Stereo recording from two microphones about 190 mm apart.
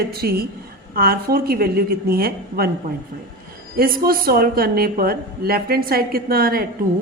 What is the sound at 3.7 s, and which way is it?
A woman's voice, 50° right (ahead or behind).